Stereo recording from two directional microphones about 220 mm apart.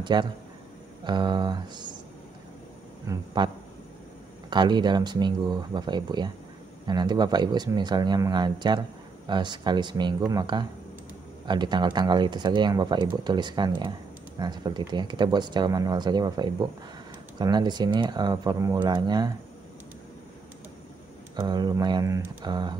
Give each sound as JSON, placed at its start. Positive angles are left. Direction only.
{"t": 0.0, "sound": "speech", "side_deg": -20}
{"t": 3.1, "sound": "speech", "side_deg": -20}
{"t": 21.4, "sound": "speech", "side_deg": -20}